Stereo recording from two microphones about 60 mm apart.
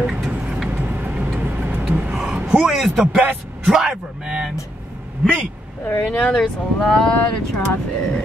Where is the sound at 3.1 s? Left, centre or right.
Right.